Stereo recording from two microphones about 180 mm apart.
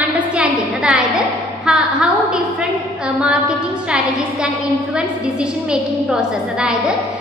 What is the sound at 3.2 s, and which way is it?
Speech, 5° right (ahead or behind).